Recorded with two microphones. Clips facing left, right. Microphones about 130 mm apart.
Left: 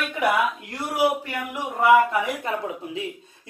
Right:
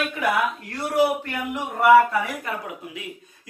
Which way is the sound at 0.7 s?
10° left (ahead or behind).